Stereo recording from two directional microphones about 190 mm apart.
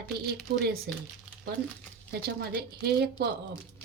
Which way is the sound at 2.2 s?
55° right (ahead or behind).